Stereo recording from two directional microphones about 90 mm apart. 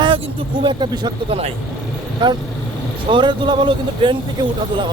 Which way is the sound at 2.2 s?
65° right (ahead or behind).